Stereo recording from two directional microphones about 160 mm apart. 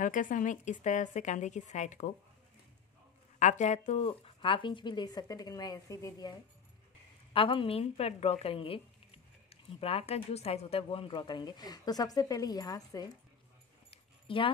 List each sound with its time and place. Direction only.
0.0 s speech: 55° left (ahead or behind)
3.3 s speech: 50° left (ahead or behind); by 6.3 s 20° left (ahead or behind)
7.3 s a woman's voice: 35° left (ahead or behind)
13.8 s dog: 35° left (ahead or behind)